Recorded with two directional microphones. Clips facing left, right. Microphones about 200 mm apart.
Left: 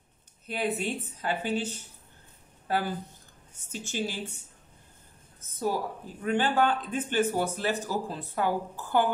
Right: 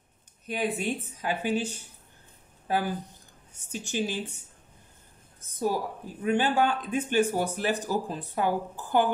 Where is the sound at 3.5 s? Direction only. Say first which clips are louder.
Right 3 dB; 15° right (ahead or behind).